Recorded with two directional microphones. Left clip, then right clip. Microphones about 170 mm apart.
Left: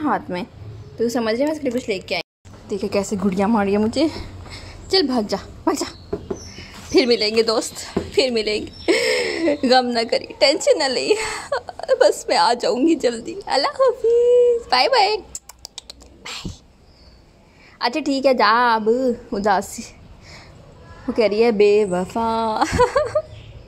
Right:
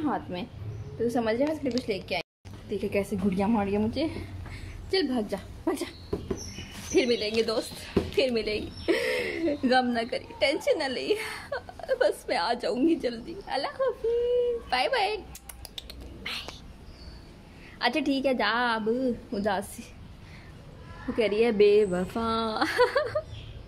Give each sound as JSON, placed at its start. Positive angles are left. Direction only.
{"t": 0.0, "sound": "a woman's voice", "side_deg": 35}
{"t": 17.7, "sound": "a woman's voice", "side_deg": 20}
{"t": 21.2, "sound": "speech", "side_deg": 25}